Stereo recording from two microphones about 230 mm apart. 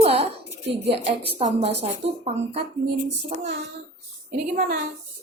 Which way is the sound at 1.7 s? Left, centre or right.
Right.